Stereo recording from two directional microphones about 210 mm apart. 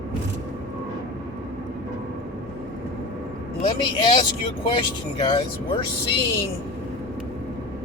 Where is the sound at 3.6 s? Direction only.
20° left (ahead or behind).